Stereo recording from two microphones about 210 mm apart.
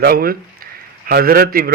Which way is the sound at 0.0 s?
45° right (ahead or behind).